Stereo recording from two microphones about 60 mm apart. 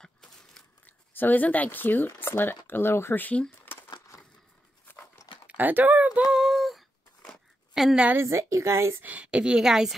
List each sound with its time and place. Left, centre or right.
0.0 s a sound: centre
0.8 s speech: left
3.4 s a sound: left
5.5 s speech: right
6.2 s female singing: centre
7.7 s a woman's voice: centre
8.2 s speech: right
9.0 s a woman's voice: right